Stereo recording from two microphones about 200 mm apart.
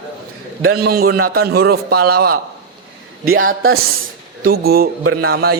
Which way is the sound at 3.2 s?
90° right.